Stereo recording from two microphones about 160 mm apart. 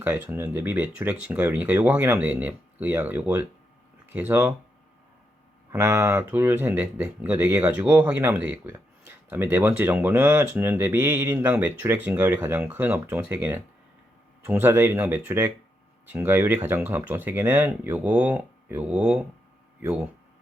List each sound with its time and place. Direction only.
0.0 s speech: 15° right (ahead or behind)
5.7 s speech: 15° right (ahead or behind)